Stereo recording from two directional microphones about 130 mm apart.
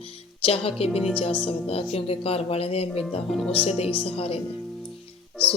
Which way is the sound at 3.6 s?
50° left (ahead or behind).